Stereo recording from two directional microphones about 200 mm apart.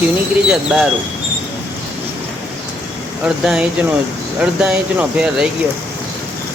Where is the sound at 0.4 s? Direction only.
5° right (ahead or behind).